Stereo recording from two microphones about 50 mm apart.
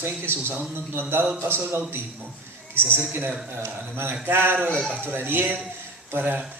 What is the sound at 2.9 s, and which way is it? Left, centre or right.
Speech, right.